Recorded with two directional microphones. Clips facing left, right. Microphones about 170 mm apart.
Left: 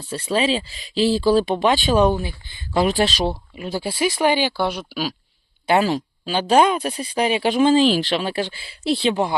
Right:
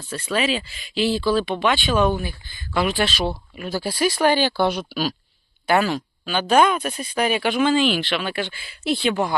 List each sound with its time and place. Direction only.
0.1 s speech: 30° left (ahead or behind)
2.7 s speech: 40° left (ahead or behind)
3.5 s speech: 25° left (ahead or behind); by 5.1 s 5° left (ahead or behind)
5.6 s speech: 30° left (ahead or behind)